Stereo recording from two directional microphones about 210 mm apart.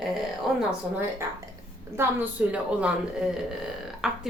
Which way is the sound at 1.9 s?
10° right (ahead or behind).